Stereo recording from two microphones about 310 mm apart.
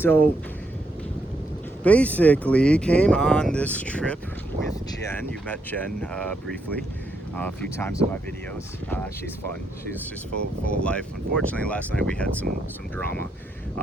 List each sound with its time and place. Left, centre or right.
0.0 s speech: centre
1.8 s speech: centre
10.8 s speech: centre